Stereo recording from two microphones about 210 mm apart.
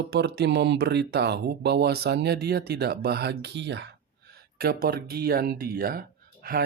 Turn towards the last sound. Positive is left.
turn(degrees=-45)  # may be behind; listen again after turning